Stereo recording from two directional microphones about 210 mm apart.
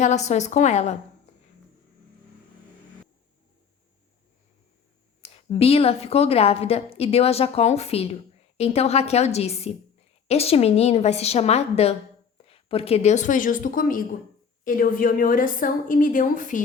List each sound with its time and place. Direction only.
0.0 s a woman's voice: 35° left (ahead or behind)
5.2 s a woman's voice: 30° left (ahead or behind)